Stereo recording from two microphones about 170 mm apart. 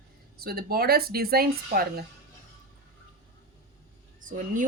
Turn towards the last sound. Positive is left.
turn(degrees=-50)  # may be behind; listen again after turning